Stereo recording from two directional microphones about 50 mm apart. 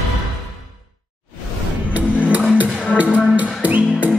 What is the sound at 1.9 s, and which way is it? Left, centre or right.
Music, right.